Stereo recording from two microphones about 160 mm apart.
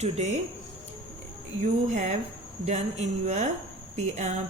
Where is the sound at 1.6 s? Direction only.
50° right (ahead or behind).